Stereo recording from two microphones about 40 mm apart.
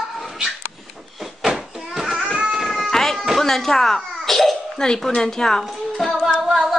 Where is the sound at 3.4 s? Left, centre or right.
Centre.